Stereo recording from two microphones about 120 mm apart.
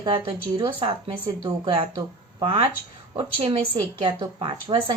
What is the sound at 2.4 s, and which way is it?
Speech, 50° right (ahead or behind).